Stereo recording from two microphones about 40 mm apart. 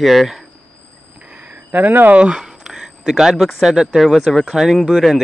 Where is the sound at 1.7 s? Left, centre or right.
Right.